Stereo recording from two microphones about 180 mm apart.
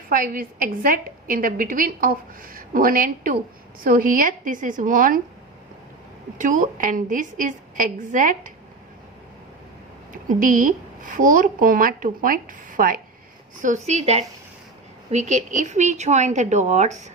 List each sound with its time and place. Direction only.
0.1 s a woman's voice: 50° right (ahead or behind)
6.4 s a woman's voice: 45° right (ahead or behind)
10.1 s a woman's voice: 50° right (ahead or behind)